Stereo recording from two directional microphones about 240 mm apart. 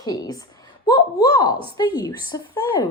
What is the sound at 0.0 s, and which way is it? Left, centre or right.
A woman's voice, centre.